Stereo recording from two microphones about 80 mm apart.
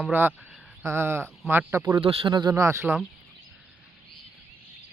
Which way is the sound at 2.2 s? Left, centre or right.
Right.